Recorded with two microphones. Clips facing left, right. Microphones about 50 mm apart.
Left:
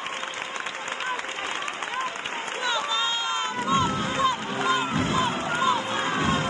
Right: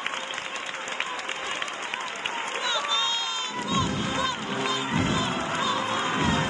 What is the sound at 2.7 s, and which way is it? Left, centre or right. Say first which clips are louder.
Run: left 2 dB; centre.